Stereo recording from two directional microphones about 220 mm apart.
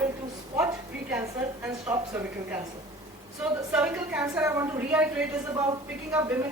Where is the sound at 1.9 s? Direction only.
10° right (ahead or behind).